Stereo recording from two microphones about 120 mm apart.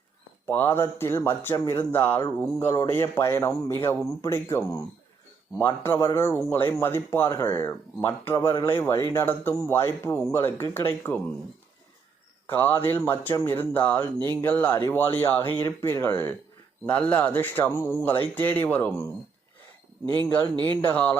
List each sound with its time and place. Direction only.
0.4 s a man's voice: 20° left (ahead or behind)
12.5 s a man's voice: 15° left (ahead or behind)
20.1 s speech: 15° left (ahead or behind)